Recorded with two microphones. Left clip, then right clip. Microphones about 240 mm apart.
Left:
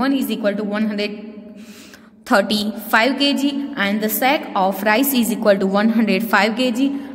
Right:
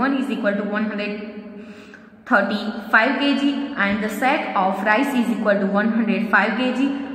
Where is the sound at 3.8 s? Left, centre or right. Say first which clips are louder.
Left 3 dB; left.